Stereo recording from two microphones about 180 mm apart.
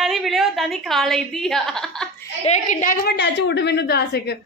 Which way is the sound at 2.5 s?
40° left (ahead or behind).